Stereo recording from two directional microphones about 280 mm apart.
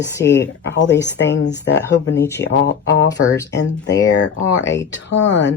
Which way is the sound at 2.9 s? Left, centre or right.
Left.